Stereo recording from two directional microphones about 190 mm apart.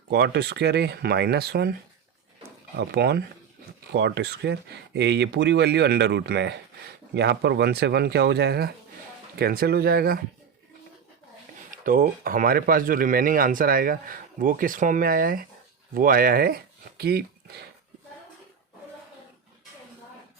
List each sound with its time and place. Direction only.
0.1 s speech: 60° right (ahead or behind)
2.7 s speech: 60° right (ahead or behind)
11.7 s speech: 50° right (ahead or behind)